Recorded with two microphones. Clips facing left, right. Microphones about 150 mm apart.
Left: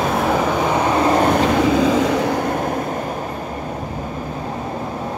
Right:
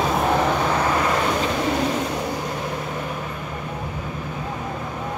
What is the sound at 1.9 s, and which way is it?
Vehicle, 90° left.